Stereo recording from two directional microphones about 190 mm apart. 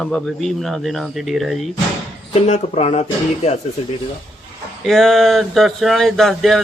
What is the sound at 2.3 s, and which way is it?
Speech, 35° left (ahead or behind).